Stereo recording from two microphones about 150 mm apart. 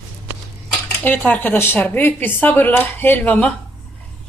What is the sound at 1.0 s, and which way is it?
Speech, 10° left (ahead or behind).